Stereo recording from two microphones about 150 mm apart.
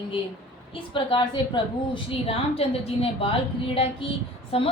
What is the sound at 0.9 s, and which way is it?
A woman's voice, 35° left (ahead or behind).